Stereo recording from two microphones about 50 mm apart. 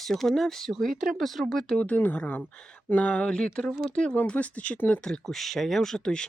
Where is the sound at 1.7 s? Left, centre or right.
Left.